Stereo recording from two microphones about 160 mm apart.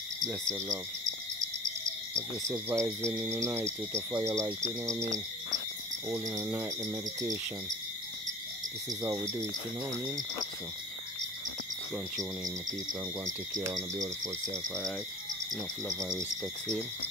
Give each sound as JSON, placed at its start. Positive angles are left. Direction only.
{"t": 0.2, "sound": "frog", "side_deg": -20}
{"t": 2.7, "sound": "frog", "side_deg": -20}
{"t": 3.1, "sound": "cricket", "side_deg": -5}
{"t": 3.3, "sound": "cricket", "side_deg": -15}
{"t": 6.1, "sound": "frog", "side_deg": -20}
{"t": 13.2, "sound": "frog", "side_deg": -20}